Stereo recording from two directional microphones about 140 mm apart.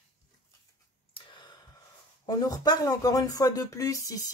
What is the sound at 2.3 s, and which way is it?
Speech, 25° left (ahead or behind).